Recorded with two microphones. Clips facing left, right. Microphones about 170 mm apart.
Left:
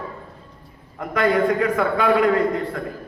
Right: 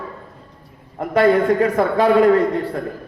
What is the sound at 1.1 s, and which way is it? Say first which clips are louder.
A man's voice: right 4 dB; 30° right (ahead or behind).